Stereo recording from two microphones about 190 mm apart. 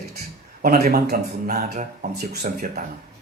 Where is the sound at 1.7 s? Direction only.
40° right (ahead or behind).